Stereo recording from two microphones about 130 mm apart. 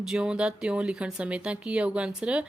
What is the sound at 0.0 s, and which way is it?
A woman's voice, 5° right (ahead or behind).